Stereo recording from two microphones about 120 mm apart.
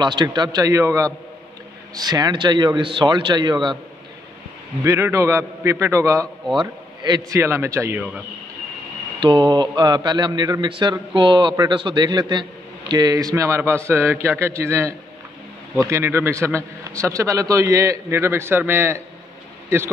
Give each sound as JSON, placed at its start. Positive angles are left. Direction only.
{"t": 0.0, "sound": "a man's voice", "side_deg": -40}
{"t": 4.8, "sound": "a man's voice", "side_deg": -25}
{"t": 6.6, "sound": "a man's voice", "side_deg": -35}
{"t": 9.2, "sound": "a man's voice", "side_deg": -45}